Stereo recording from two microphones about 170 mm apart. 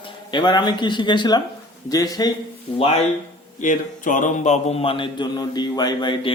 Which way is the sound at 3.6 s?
50° left (ahead or behind).